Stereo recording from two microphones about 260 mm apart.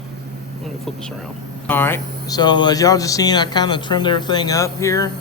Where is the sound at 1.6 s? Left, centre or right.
Centre.